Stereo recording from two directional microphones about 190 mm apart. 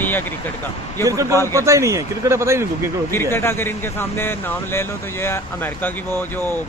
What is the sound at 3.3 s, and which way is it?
Speech, 10° left (ahead or behind).